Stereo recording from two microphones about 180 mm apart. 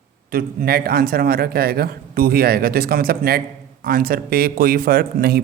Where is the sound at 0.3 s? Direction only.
55° right (ahead or behind).